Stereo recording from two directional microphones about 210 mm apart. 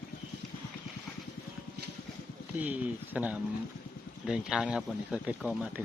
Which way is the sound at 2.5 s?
5° right (ahead or behind).